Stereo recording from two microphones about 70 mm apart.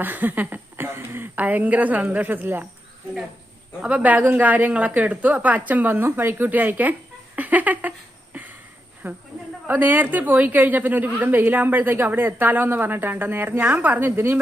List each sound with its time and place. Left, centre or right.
0.0 s a woman's voice: right
3.8 s a woman's voice: centre
7.3 s a sound: right
9.0 s speech: right
9.6 s a woman's voice: right